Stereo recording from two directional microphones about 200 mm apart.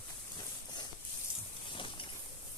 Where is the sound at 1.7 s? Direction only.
25° left (ahead or behind).